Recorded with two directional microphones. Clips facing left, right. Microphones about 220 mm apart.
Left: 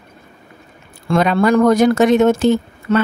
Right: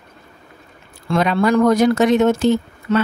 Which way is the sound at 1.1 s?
50° left (ahead or behind).